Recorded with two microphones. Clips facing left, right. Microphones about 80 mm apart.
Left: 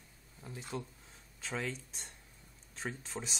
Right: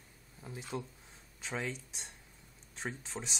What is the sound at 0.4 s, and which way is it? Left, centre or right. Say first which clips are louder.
Speech: right 1 dB; centre.